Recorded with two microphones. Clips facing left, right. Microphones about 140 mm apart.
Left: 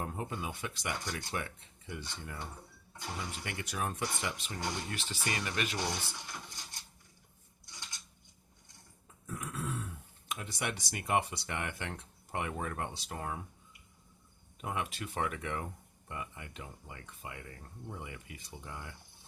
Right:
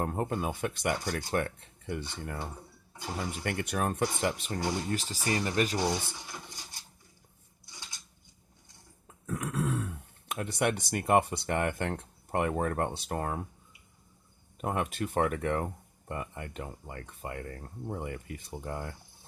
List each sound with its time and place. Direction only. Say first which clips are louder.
0.0 s speech: right 7 dB; 50° right (ahead or behind)
2.9 s a sound: right 4 dB; 10° right (ahead or behind)
3.4 s speech: right 7 dB; 55° right (ahead or behind)
4.6 s speech: right 6 dB; 10° right (ahead or behind)
4.9 s speech: right 7 dB; 40° right (ahead or behind)
5.7 s speech: right 7 dB; 10° right (ahead or behind)
6.1 s filing: right 2 dB; 10° right (ahead or behind)
7.6 s scissors: right 1 dB; 10° right (ahead or behind)
9.0 s speech: right 7 dB; 70° right (ahead or behind); by 13.4 s 50° right (ahead or behind)
14.6 s speech: right 6 dB; 50° right (ahead or behind)